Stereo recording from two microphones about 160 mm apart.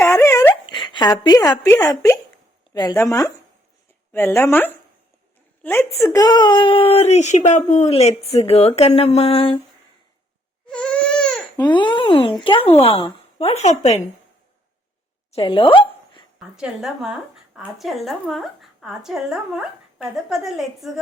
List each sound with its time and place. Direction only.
0.0 s dog: 15° left (ahead or behind)
0.5 s a sound: 30° left (ahead or behind)
1.8 s speech: 20° left (ahead or behind); by 9.6 s 35° left (ahead or behind)
10.7 s baby cry: 5° left (ahead or behind)
11.5 s speech: 30° left (ahead or behind); by 14.1 s 45° left (ahead or behind)
15.3 s a sound: 35° left (ahead or behind)
16.6 s speech: 5° right (ahead or behind)